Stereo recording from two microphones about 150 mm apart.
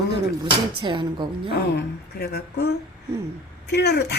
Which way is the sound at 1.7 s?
90° left.